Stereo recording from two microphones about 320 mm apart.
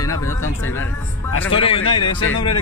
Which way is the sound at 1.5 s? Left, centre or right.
Centre.